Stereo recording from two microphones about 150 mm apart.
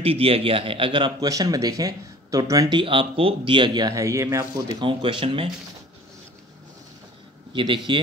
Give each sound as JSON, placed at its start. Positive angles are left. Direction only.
{"t": 0.0, "sound": "a man's voice", "side_deg": -40}
{"t": 7.5, "sound": "a man's voice", "side_deg": -30}